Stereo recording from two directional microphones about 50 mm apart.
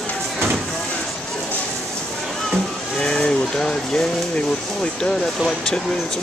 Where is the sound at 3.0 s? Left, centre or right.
Centre.